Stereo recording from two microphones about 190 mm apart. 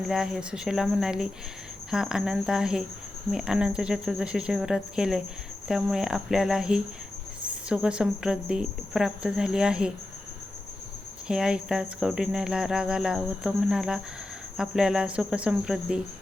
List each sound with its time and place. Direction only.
0.0 s speech: centre (ahead or behind)
11.3 s speech: 5° right (ahead or behind)